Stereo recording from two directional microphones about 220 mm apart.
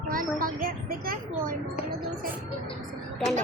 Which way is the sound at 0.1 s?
40° right (ahead or behind).